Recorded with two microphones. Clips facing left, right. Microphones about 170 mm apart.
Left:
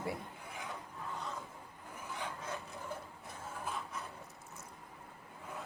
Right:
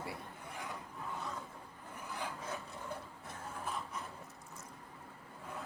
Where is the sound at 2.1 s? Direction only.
5° right (ahead or behind).